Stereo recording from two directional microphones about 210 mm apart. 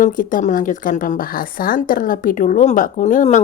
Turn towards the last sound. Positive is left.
turn(degrees=35)  # may be behind; listen again after turning